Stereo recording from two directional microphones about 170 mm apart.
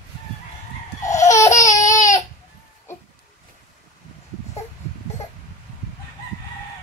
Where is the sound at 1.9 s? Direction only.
45° left (ahead or behind).